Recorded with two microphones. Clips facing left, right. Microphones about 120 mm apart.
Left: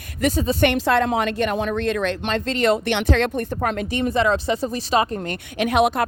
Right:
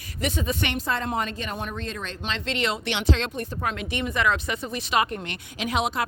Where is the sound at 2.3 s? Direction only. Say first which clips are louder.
Left 7 dB; 45° left (ahead or behind).